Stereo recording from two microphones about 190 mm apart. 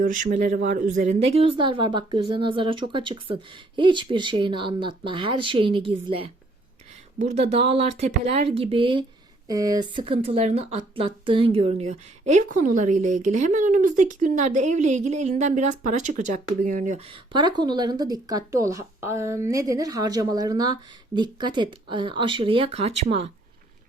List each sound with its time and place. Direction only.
0.0 s speech: 45° right (ahead or behind)
17.1 s speech: 25° right (ahead or behind)